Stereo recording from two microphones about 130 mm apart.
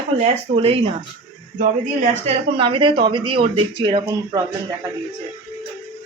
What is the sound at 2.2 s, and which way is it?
Speech, 45° right (ahead or behind).